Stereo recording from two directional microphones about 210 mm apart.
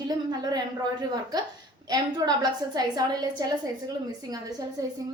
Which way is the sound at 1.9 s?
20° right (ahead or behind).